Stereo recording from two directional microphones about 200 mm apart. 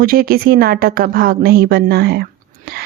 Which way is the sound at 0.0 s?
45° right (ahead or behind).